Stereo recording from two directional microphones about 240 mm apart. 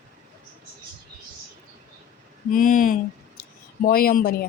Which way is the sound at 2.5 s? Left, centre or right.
Left.